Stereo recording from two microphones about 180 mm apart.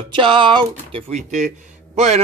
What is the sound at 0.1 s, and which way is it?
Speech, 25° right (ahead or behind).